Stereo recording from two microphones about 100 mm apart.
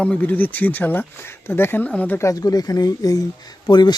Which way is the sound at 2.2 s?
40° left (ahead or behind).